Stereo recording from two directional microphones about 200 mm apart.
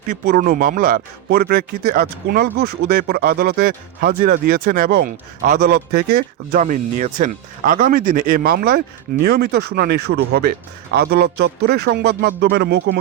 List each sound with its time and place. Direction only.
0.3 s a man's voice: 45° right (ahead or behind)